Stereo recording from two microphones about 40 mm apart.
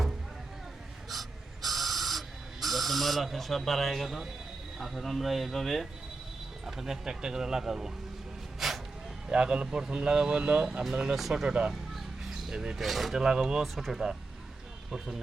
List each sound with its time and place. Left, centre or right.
1.1 s a sound: centre
4.8 s speech: centre
6.7 s speech: centre
8.5 s a sound: centre
9.3 s speech: right
9.6 s speech: centre
11.2 s speech: centre
11.4 s speech: right
11.7 s a sound: centre
12.8 s speech: centre
13.1 s speech: centre